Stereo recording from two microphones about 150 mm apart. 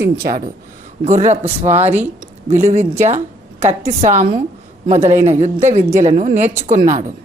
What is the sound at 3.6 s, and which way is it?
A woman's voice, 50° right (ahead or behind).